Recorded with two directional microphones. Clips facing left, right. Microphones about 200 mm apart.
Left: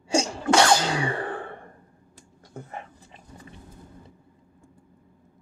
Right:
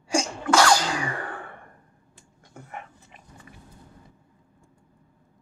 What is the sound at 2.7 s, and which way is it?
Dog, 30° left (ahead or behind).